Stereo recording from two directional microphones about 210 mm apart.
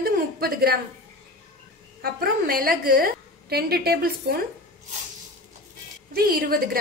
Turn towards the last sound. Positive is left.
turn(degrees=-45)  # may be behind; listen again after turning